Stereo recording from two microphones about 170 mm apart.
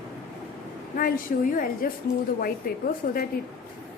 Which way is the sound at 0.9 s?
55° left (ahead or behind).